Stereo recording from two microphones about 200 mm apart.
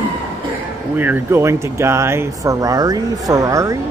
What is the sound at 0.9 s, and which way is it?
Speech, 10° right (ahead or behind).